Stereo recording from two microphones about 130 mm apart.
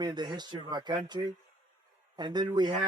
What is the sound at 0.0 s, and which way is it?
Speech, 35° right (ahead or behind).